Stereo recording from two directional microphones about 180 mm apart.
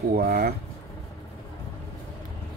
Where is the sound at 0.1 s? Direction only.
55° right (ahead or behind).